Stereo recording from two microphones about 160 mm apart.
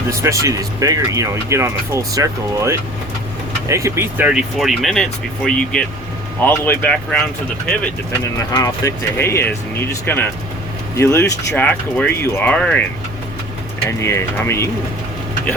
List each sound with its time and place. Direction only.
0.1 s speech: 20° right (ahead or behind); by 7.2 s 10° left (ahead or behind)
8.2 s speech: 20° left (ahead or behind)
14.0 s speech: 15° left (ahead or behind)